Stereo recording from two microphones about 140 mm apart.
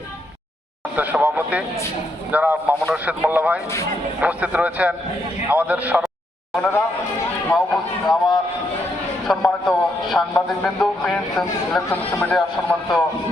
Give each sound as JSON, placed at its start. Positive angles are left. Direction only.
{"t": 0.9, "sound": "a man's voice", "side_deg": -10}
{"t": 6.6, "sound": "speech", "side_deg": 20}
{"t": 7.5, "sound": "speech", "side_deg": 0}
{"t": 9.2, "sound": "a man's voice", "side_deg": 0}